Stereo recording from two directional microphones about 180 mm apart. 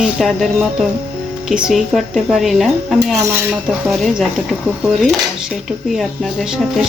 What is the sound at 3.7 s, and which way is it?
Speech, centre (ahead or behind).